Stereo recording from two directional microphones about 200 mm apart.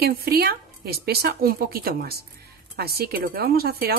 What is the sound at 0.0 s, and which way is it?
Speech, 50° right (ahead or behind).